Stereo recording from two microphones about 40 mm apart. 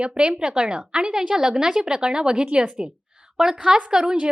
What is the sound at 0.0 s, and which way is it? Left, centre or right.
A woman's voice, right.